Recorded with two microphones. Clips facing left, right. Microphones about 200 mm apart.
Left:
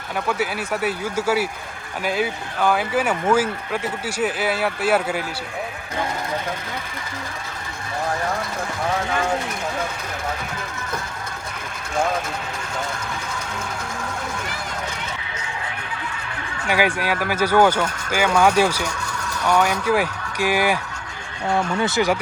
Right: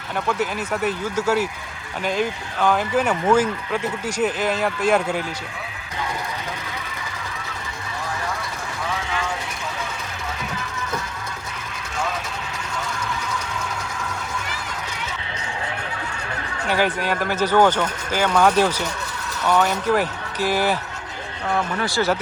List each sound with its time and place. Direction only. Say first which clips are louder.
0.3 s speech: even; 10° left (ahead or behind)
16.6 s speech: left 1 dB; 10° left (ahead or behind)
21.5 s speech: left 2 dB; 25° left (ahead or behind)